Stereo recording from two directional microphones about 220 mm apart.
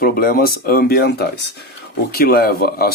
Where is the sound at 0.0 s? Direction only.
40° left (ahead or behind).